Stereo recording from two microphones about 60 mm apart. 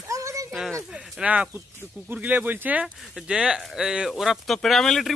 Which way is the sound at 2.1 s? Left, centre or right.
Right.